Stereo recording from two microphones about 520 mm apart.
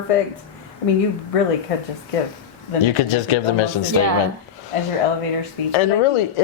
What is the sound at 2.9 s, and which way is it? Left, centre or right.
Speech, left.